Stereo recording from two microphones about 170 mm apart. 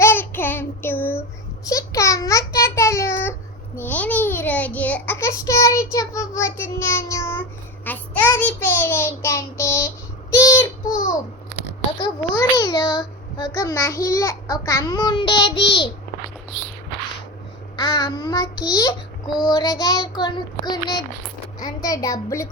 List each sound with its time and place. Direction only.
0.0 s child singing: 15° left (ahead or behind)
1.6 s a sound: 20° left (ahead or behind)
7.9 s child singing: 10° left (ahead or behind)
12.0 s a sound: 25° left (ahead or behind)
17.7 s child singing: 25° left (ahead or behind)
21.6 s a child's voice: 20° left (ahead or behind)